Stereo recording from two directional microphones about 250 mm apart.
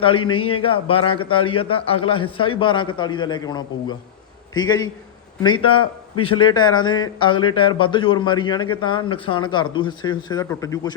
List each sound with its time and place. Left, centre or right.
0.0 s a man's voice: left
5.4 s a man's voice: centre